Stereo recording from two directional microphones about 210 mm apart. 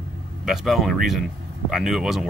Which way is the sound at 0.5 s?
Centre (ahead or behind).